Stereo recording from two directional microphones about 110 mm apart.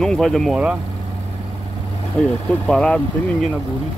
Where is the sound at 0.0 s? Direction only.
5° left (ahead or behind).